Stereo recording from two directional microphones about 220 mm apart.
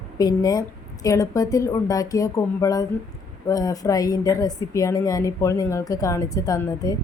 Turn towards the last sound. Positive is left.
turn(degrees=15)  # may be behind; listen again after turning